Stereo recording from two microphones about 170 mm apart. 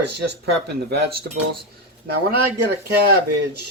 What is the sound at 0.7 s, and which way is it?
Speech, 75° right (ahead or behind).